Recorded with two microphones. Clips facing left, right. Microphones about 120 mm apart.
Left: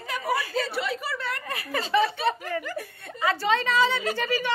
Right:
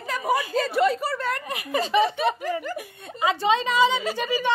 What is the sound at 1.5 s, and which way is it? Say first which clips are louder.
A woman's voice: right 1 dB; 15° right (ahead or behind).